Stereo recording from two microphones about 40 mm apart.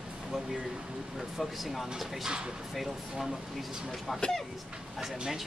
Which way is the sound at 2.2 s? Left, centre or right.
Centre.